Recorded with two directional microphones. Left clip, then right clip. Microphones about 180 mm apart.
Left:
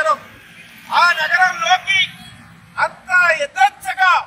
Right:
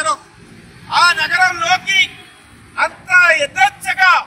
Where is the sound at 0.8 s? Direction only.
30° right (ahead or behind).